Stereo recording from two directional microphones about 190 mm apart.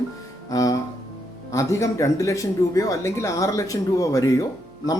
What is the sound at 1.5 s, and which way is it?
Speech, 15° left (ahead or behind).